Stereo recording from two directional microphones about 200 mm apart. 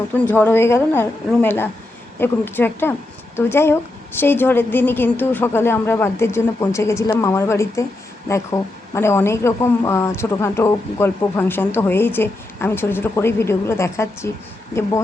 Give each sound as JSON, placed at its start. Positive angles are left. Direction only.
{"t": 0.1, "sound": "speech", "side_deg": 10}